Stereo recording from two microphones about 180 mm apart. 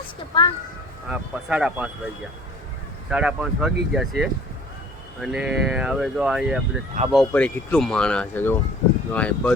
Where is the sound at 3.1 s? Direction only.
5° right (ahead or behind).